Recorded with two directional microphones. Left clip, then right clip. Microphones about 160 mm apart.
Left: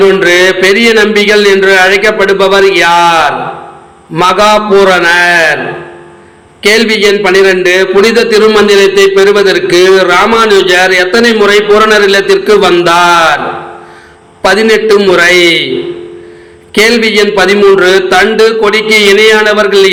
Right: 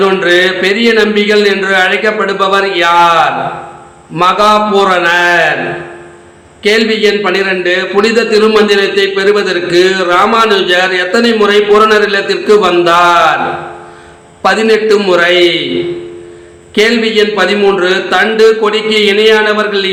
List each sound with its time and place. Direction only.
0.2 s a man's voice: 30° left (ahead or behind)
6.6 s a man's voice: 30° left (ahead or behind)
14.4 s a man's voice: 25° left (ahead or behind)
16.7 s a man's voice: 30° left (ahead or behind)